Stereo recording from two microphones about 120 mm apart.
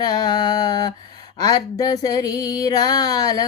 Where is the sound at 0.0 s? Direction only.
35° left (ahead or behind).